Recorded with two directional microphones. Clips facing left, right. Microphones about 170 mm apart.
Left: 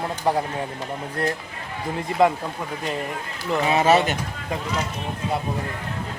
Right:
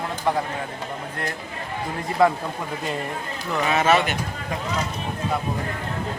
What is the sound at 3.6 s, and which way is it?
Speech, 20° left (ahead or behind).